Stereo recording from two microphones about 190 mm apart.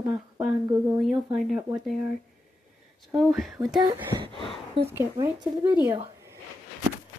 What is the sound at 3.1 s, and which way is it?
Speech, centre (ahead or behind).